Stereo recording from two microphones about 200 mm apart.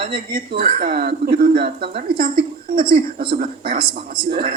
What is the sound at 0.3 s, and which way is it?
Speech, 45° right (ahead or behind).